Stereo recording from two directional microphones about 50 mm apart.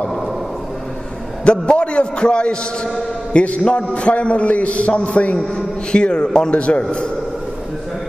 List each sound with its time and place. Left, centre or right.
1.4 s a man's voice: centre